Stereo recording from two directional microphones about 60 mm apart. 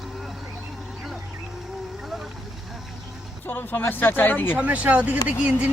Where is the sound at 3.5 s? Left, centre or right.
Left.